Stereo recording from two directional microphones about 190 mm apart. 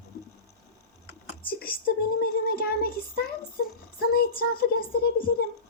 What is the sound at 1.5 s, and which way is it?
Whispering, 50° left (ahead or behind).